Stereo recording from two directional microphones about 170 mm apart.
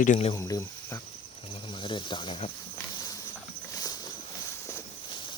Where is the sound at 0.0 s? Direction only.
50° left (ahead or behind).